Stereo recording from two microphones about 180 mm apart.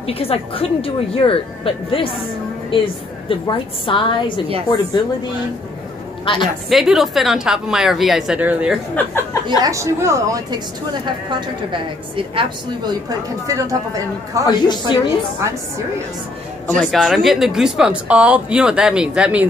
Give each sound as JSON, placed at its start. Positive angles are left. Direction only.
{"t": 0.0, "sound": "a woman's voice", "side_deg": 35}
{"t": 6.2, "sound": "a woman's voice", "side_deg": 25}
{"t": 6.7, "sound": "a woman's voice", "side_deg": 0}
{"t": 8.9, "sound": "speech", "side_deg": 15}
{"t": 9.6, "sound": "a woman's voice", "side_deg": -15}
{"t": 13.5, "sound": "speech", "side_deg": -20}
{"t": 14.4, "sound": "a woman's voice", "side_deg": 25}
{"t": 16.6, "sound": "a woman's voice", "side_deg": 5}